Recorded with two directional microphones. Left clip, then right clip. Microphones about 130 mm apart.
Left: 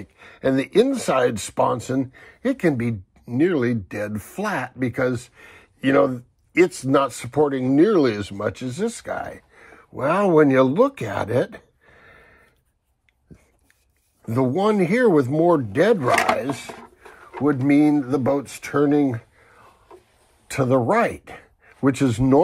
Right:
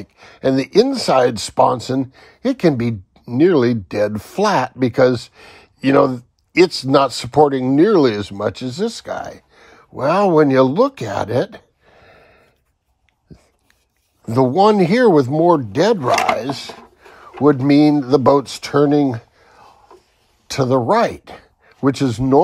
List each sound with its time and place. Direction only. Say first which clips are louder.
0.0 s speech: right 4 dB; 20° right (ahead or behind)
14.2 s speech: right 8 dB; 25° right (ahead or behind)
19.4 s a sound: right 5 dB; 20° right (ahead or behind)
20.5 s speech: right 4 dB; 20° right (ahead or behind)